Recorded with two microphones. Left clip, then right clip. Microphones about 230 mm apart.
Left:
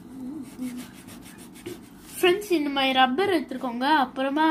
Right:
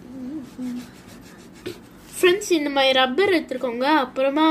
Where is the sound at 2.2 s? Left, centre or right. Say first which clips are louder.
Right 4 dB; right.